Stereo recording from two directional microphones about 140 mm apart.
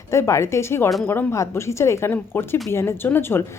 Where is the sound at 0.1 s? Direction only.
20° left (ahead or behind).